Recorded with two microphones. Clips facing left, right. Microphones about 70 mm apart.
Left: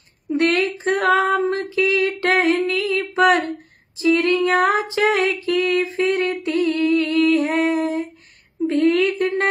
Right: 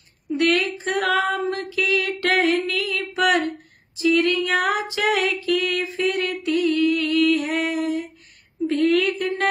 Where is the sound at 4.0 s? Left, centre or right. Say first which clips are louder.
Left 2 dB; left.